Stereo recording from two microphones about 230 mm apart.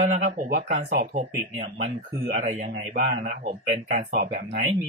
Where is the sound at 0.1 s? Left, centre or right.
Right.